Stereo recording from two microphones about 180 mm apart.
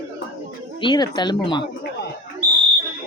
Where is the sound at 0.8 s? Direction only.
25° left (ahead or behind).